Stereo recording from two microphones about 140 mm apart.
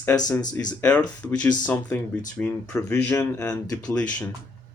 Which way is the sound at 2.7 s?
15° left (ahead or behind).